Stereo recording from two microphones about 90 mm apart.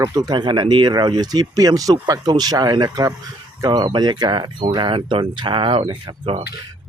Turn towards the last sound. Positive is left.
turn(degrees=-80)